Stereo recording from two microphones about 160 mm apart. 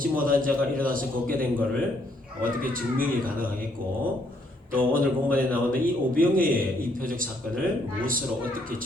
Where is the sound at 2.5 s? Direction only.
60° right (ahead or behind).